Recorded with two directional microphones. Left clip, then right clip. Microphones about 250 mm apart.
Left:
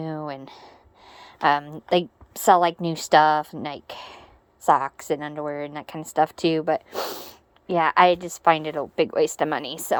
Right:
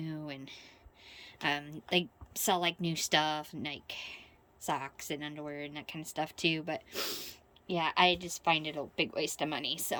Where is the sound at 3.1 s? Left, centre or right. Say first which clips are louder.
Left 15 dB; left.